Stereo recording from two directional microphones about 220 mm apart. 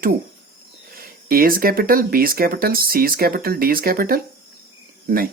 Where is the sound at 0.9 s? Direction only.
40° right (ahead or behind).